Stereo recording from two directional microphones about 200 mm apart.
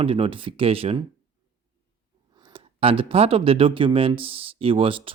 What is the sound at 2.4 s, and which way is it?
Speech, 25° right (ahead or behind).